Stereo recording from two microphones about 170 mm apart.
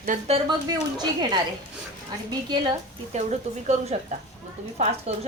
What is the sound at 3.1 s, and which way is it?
A woman's voice, 40° right (ahead or behind).